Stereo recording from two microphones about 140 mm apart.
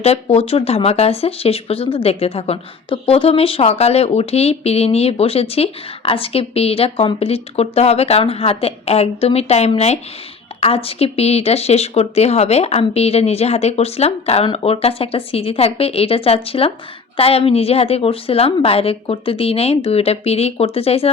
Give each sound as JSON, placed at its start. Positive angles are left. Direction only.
{"t": 0.0, "sound": "speech", "side_deg": 45}